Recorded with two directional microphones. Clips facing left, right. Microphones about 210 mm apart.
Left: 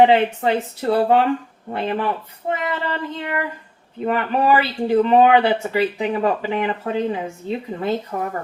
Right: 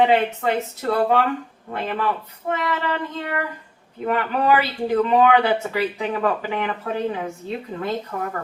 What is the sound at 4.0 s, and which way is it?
A woman's voice, 25° left (ahead or behind).